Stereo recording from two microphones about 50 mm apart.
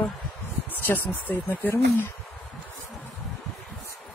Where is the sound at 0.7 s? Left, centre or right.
Left.